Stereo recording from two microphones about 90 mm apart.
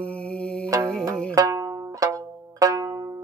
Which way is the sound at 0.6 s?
35° right (ahead or behind).